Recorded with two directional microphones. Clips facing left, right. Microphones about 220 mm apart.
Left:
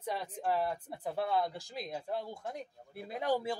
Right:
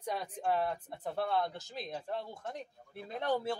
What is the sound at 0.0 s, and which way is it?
Speech, 5° left (ahead or behind).